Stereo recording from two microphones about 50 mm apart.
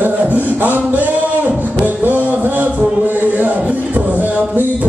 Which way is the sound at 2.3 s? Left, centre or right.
Right.